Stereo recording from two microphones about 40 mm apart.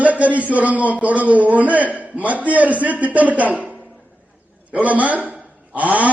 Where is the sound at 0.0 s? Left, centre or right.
Right.